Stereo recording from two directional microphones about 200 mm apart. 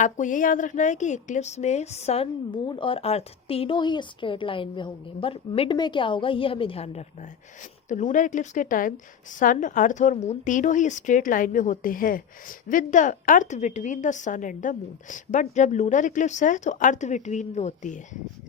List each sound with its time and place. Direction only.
0.0 s a woman's voice: 40° left (ahead or behind)